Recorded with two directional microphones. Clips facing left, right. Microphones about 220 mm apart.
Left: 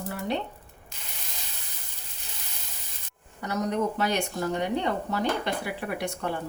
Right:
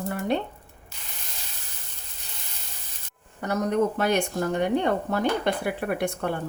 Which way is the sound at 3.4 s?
50° right (ahead or behind).